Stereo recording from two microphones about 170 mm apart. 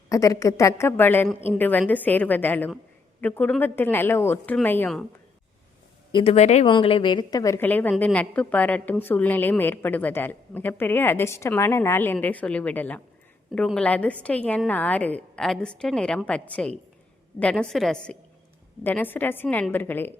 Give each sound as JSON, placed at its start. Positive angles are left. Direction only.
{"t": 0.1, "sound": "a woman's voice", "side_deg": 20}
{"t": 6.1, "sound": "speech", "side_deg": 30}
{"t": 6.3, "sound": "speech", "side_deg": 40}
{"t": 6.7, "sound": "a woman's voice", "side_deg": 30}